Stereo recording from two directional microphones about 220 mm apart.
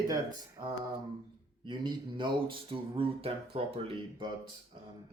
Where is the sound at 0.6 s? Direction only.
20° right (ahead or behind).